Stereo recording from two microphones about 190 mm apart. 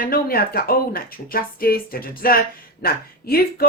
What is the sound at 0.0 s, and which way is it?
Speech, 50° left (ahead or behind).